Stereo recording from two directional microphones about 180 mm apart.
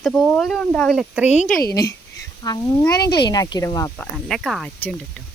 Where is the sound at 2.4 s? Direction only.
25° left (ahead or behind).